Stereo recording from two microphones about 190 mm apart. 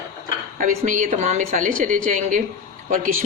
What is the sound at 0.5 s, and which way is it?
A man's voice, 45° right (ahead or behind).